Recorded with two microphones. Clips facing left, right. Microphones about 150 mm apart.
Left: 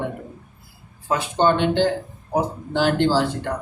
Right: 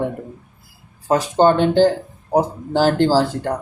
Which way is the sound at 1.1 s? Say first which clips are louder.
Right 5 dB; 40° right (ahead or behind).